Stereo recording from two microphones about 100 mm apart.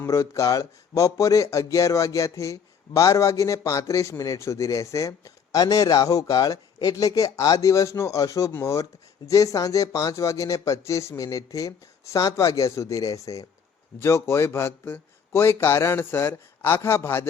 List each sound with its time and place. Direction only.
0.0 s speech: 30° left (ahead or behind)